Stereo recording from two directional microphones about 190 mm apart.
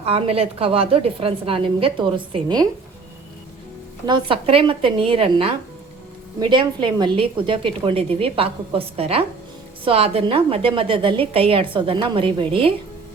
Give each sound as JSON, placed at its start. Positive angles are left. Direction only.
{"t": 0.0, "sound": "a woman's voice", "side_deg": -30}
{"t": 4.0, "sound": "a woman's voice", "side_deg": -25}